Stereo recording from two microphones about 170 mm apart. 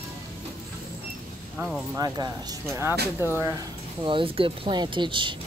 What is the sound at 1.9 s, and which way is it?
Speech, 20° right (ahead or behind).